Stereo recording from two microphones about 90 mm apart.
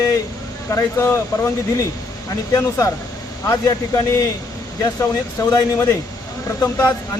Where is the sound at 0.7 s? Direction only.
35° left (ahead or behind).